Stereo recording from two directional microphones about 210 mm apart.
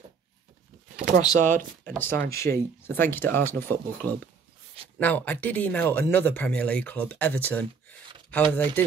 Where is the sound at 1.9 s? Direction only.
10° left (ahead or behind).